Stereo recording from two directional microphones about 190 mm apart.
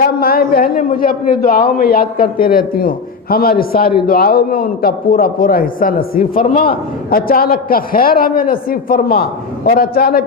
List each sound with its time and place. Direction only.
0.0 s a man's voice: 50° left (ahead or behind)